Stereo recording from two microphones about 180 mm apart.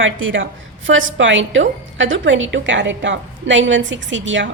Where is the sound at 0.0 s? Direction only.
90° right.